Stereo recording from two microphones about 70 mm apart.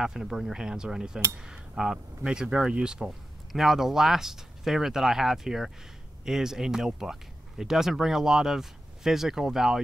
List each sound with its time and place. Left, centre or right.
0.0 s speech: centre